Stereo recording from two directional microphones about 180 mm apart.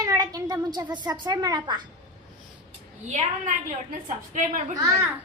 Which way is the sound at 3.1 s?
45° right (ahead or behind).